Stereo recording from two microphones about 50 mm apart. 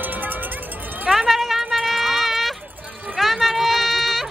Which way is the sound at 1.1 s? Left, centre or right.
Centre.